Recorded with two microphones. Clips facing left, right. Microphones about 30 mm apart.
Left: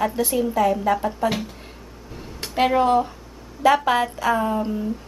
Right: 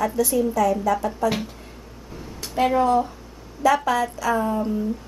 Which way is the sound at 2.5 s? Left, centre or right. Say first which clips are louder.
Left 1 dB; left.